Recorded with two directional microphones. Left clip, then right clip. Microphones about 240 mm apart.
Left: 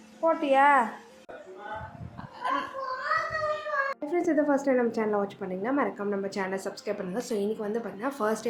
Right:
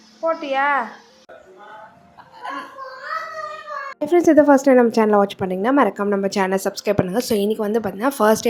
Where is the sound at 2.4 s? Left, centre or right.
Centre.